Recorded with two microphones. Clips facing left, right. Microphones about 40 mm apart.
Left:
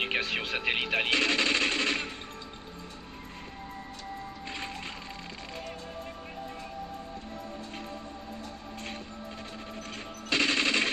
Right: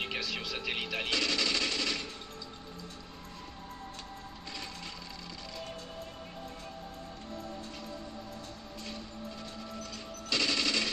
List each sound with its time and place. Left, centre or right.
0.0 s a sound: left
4.5 s vehicle: left
10.3 s machine gun: left